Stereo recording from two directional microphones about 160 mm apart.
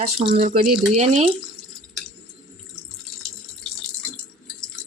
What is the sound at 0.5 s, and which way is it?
Speech, 50° right (ahead or behind).